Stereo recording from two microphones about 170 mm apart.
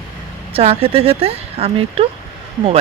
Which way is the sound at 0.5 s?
35° right (ahead or behind).